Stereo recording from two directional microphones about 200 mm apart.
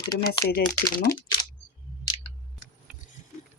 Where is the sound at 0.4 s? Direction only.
50° left (ahead or behind).